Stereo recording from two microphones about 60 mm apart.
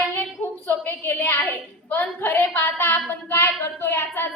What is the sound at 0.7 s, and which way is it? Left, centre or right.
A woman's voice, left.